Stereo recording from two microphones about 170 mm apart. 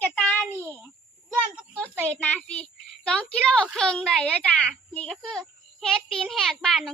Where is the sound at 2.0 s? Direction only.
10° left (ahead or behind).